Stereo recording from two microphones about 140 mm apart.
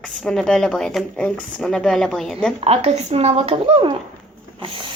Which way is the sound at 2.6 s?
45° right (ahead or behind).